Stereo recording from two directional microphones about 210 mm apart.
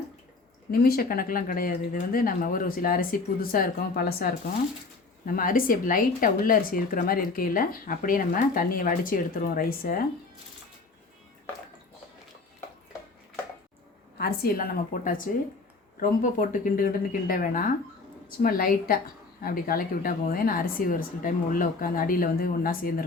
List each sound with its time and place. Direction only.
0.7 s speech: 45° left (ahead or behind)
14.2 s speech: 45° left (ahead or behind)